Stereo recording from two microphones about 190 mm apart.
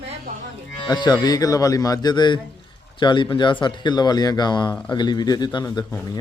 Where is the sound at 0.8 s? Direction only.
20° left (ahead or behind).